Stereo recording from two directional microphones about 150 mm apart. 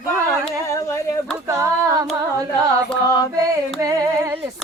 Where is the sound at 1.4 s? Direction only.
20° right (ahead or behind).